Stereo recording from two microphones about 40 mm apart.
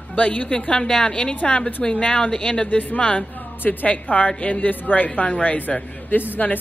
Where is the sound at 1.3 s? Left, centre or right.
Left.